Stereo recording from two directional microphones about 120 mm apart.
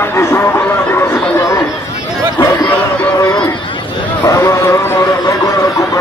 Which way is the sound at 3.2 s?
35° left (ahead or behind).